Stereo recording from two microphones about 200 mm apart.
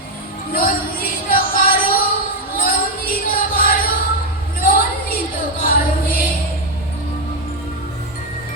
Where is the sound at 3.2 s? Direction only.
45° left (ahead or behind).